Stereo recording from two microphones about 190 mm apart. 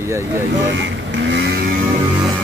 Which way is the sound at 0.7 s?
70° right (ahead or behind).